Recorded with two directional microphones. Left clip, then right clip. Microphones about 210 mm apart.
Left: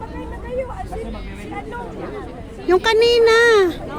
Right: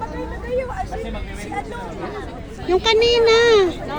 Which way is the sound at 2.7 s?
30° left (ahead or behind).